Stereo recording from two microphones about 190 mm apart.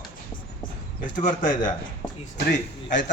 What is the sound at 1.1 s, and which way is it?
Speech, 40° left (ahead or behind).